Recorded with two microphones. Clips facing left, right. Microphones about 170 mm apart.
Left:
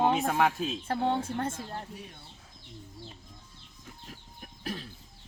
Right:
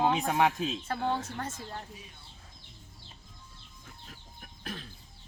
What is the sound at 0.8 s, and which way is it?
Speech, 30° left (ahead or behind).